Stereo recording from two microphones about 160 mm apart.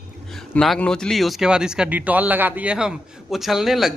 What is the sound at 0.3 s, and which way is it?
A woman's voice, centre (ahead or behind).